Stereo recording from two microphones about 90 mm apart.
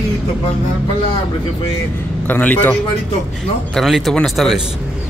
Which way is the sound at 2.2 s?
20° left (ahead or behind).